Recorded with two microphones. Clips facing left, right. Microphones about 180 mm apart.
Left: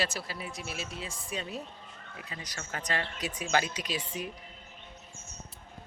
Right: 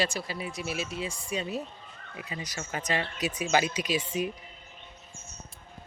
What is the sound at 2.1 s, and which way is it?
Speech, 10° right (ahead or behind).